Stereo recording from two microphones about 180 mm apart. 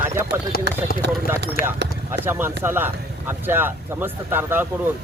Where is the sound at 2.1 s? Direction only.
10° right (ahead or behind).